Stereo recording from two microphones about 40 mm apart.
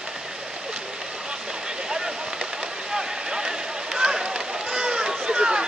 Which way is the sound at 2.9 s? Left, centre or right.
Centre.